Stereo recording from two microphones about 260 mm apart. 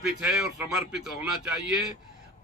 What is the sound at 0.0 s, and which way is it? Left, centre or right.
A man's voice, centre.